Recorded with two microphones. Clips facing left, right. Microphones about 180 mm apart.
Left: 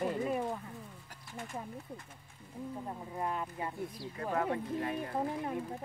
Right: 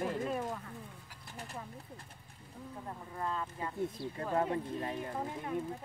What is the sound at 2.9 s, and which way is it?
Speech, 15° left (ahead or behind).